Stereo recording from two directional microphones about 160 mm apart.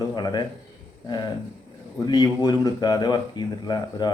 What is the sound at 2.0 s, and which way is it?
Speech, 25° left (ahead or behind).